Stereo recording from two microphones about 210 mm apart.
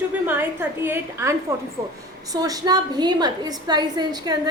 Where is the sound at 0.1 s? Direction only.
10° right (ahead or behind).